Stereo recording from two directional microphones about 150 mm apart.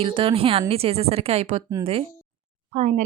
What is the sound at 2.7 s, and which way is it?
Speech, 55° right (ahead or behind).